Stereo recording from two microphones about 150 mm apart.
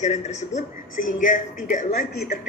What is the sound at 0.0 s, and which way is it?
A man's voice, 50° left (ahead or behind).